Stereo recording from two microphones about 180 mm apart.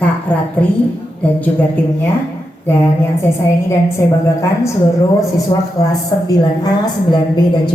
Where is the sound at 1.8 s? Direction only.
10° left (ahead or behind).